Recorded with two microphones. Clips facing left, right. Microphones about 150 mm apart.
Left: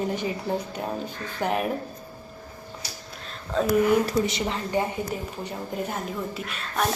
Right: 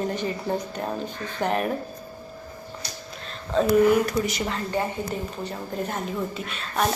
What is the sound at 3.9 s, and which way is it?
Speech, 25° left (ahead or behind).